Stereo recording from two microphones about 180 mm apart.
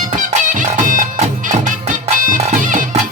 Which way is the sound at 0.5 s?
45° right (ahead or behind).